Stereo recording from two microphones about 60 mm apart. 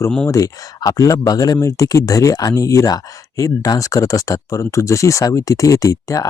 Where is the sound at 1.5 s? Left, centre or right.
Left.